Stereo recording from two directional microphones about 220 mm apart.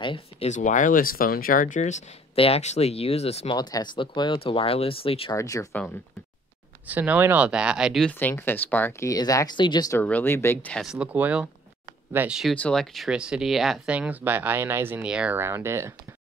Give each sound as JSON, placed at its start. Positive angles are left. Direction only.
{"t": 0.0, "sound": "speech", "side_deg": 25}
{"t": 5.4, "sound": "speech", "side_deg": 15}
{"t": 6.9, "sound": "speech", "side_deg": -10}